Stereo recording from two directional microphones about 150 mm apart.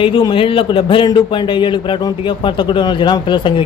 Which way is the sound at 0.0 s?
35° left (ahead or behind).